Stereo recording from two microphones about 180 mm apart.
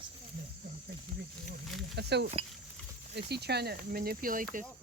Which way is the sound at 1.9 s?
70° right (ahead or behind).